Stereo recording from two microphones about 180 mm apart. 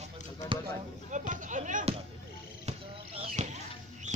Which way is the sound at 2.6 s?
35° right (ahead or behind).